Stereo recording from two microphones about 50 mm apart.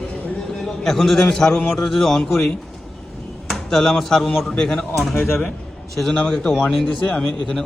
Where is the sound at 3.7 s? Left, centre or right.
Centre.